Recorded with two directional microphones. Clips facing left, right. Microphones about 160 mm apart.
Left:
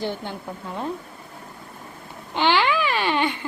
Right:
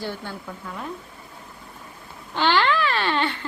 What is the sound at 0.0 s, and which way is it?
Speech, 20° left (ahead or behind).